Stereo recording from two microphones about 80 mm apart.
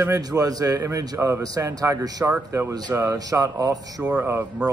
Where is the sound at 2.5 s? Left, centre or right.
Right.